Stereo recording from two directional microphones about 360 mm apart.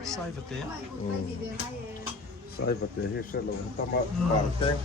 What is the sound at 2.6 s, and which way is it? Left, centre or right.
Speech, left.